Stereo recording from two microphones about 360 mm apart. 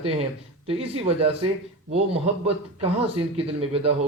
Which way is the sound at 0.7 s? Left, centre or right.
Centre.